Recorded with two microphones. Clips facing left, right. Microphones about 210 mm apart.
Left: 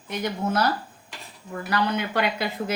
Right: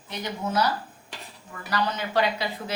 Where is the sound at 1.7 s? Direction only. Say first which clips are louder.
Left 1 dB; 60° left (ahead or behind).